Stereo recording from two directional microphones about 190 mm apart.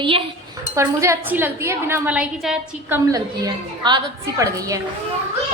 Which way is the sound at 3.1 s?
20° right (ahead or behind).